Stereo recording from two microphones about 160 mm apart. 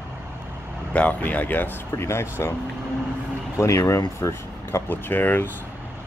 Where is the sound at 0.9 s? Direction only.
10° left (ahead or behind).